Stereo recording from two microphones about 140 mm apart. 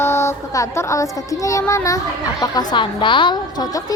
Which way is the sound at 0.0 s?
20° left (ahead or behind).